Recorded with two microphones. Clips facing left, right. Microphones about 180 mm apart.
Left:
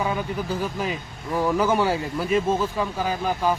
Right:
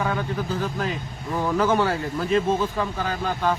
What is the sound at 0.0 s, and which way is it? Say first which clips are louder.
Speech: even; 10° left (ahead or behind).